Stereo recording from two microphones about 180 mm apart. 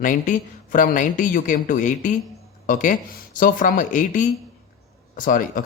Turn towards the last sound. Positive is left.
turn(degrees=50)  # may be behind; listen again after turning